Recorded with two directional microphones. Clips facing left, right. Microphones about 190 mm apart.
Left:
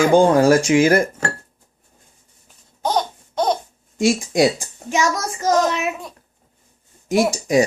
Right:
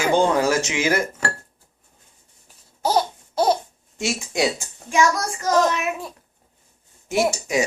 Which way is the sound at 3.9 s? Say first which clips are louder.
Left 8 dB; 55° left (ahead or behind).